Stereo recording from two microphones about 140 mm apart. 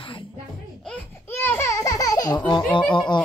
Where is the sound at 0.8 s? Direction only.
15° left (ahead or behind); by 2.6 s 35° left (ahead or behind).